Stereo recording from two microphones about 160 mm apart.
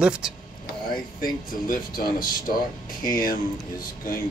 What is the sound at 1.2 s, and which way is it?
Speech, 60° left (ahead or behind).